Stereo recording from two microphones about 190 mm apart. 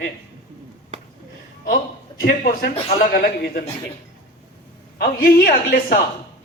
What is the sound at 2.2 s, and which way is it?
A woman's voice, 50° left (ahead or behind).